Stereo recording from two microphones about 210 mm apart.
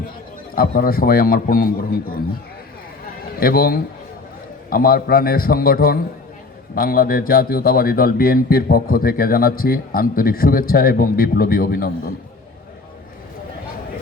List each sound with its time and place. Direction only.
0.5 s speech: 45° left (ahead or behind)
3.4 s speech: 45° left (ahead or behind)